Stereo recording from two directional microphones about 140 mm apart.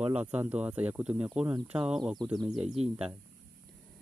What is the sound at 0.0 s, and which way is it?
Speech, 10° right (ahead or behind).